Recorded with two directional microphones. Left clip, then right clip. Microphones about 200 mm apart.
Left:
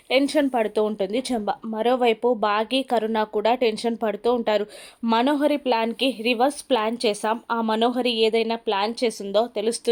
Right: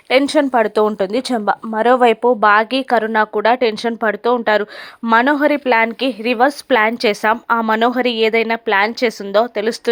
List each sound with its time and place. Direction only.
0.1 s speech: 15° right (ahead or behind)